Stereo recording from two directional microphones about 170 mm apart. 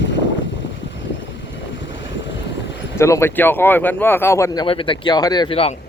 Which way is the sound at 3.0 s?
15° left (ahead or behind).